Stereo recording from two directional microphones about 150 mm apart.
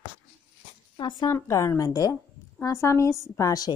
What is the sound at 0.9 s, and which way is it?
Speech, 30° left (ahead or behind).